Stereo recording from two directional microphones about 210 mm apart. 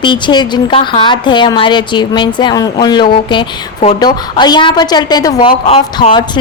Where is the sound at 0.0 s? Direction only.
20° left (ahead or behind).